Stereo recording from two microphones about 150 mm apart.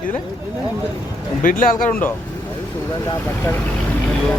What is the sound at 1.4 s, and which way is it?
Speech, 65° left (ahead or behind).